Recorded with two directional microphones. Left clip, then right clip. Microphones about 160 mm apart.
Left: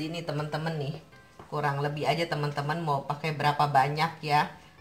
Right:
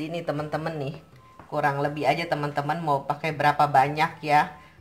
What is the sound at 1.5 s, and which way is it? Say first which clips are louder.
Speech: right 5 dB; 60° right (ahead or behind).